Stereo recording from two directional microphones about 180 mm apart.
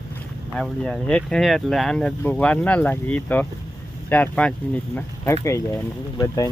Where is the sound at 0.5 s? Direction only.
5° left (ahead or behind).